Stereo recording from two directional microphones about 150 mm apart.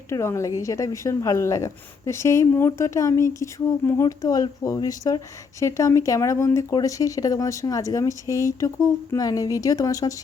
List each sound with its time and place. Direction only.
0.1 s a woman's voice: 20° left (ahead or behind)